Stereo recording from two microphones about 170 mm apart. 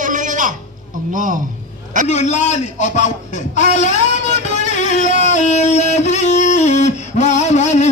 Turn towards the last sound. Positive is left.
turn(degrees=45)  # may be behind; listen again after turning